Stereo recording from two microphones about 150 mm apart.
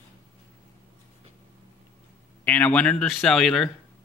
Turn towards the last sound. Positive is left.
turn(degrees=5)  # may be behind; listen again after turning